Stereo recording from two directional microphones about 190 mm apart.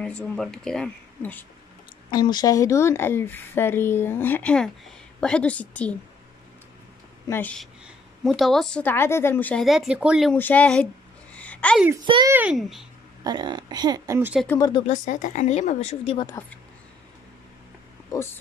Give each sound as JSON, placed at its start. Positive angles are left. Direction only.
{"t": 0.0, "sound": "speech", "side_deg": 5}
{"t": 2.0, "sound": "speech", "side_deg": 20}
{"t": 7.2, "sound": "speech", "side_deg": 10}
{"t": 10.3, "sound": "speech", "side_deg": 10}
{"t": 11.3, "sound": "a sound", "side_deg": 5}
{"t": 12.0, "sound": "speech", "side_deg": -25}
{"t": 12.3, "sound": "speech", "side_deg": -5}
{"t": 13.2, "sound": "speech", "side_deg": -20}
{"t": 14.9, "sound": "speech", "side_deg": 40}
{"t": 16.3, "sound": "speech", "side_deg": 15}
{"t": 18.1, "sound": "speech", "side_deg": 15}